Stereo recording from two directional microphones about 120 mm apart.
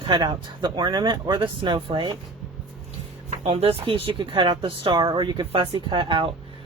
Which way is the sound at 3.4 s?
55° right (ahead or behind).